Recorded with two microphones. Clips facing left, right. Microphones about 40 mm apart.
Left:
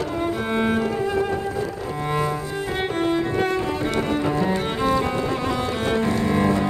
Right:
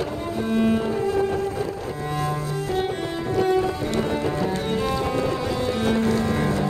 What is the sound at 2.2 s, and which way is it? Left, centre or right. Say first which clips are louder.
Music: left 1 dB; left.